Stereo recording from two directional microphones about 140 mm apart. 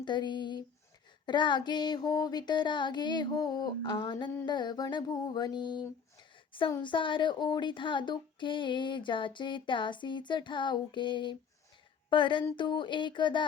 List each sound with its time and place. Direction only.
0.0 s speech: 35° left (ahead or behind)
6.8 s speech: 35° left (ahead or behind)